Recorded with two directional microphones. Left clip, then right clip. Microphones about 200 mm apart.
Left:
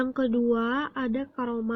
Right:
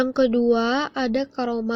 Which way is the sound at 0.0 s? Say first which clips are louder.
Right 7 dB; 15° right (ahead or behind).